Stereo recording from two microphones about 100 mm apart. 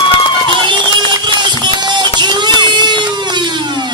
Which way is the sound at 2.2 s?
50° right (ahead or behind).